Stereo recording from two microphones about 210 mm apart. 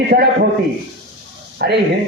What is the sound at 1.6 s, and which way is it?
Speech, 50° right (ahead or behind).